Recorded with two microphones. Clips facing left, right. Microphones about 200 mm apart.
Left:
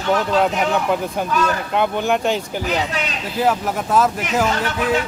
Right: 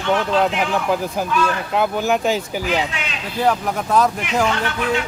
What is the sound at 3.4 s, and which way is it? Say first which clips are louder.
Speech: even; 5° left (ahead or behind).